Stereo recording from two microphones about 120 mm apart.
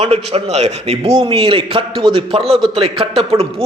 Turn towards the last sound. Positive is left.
turn(degrees=-55)  # may be behind; listen again after turning